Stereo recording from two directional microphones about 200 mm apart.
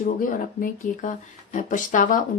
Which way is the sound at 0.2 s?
45° left (ahead or behind).